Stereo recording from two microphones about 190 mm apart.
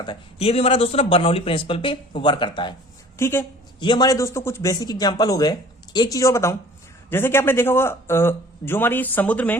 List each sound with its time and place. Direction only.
0.0 s speech: 25° left (ahead or behind)
3.2 s a woman's voice: 15° left (ahead or behind)